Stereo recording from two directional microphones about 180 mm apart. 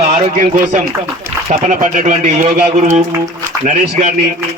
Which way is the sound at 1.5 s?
45° right (ahead or behind).